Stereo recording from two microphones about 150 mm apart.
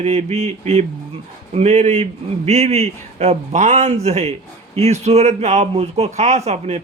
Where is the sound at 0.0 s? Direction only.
45° right (ahead or behind).